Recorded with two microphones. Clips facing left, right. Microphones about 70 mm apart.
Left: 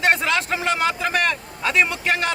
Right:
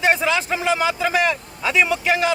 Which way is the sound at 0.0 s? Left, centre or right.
Centre.